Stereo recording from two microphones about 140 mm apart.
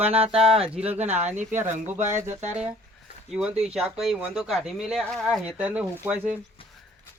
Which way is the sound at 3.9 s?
5° right (ahead or behind).